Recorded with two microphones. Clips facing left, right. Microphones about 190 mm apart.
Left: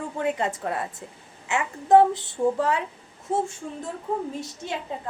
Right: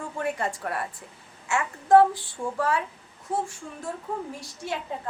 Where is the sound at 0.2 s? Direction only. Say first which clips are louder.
Left 3 dB; 20° left (ahead or behind).